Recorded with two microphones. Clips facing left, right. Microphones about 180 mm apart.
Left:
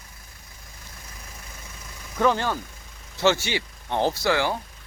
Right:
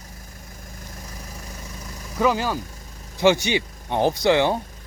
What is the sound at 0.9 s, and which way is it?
Vehicle, 40° right (ahead or behind).